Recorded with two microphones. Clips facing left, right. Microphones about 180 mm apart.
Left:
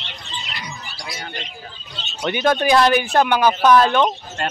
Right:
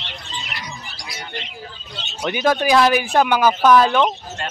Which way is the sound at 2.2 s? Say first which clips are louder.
Even; 5° right (ahead or behind).